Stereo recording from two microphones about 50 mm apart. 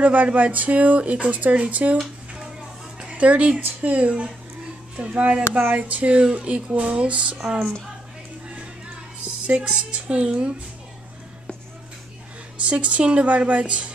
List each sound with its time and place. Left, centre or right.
0.0 s speech: right
3.1 s speech: right
7.3 s music: centre
9.2 s speech: right
12.5 s speech: right